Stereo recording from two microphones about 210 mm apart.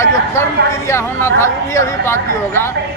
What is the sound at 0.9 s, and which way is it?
Speech, 10° left (ahead or behind).